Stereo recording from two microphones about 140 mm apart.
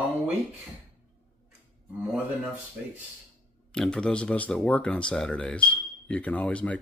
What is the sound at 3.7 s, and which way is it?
Speech, 5° left (ahead or behind).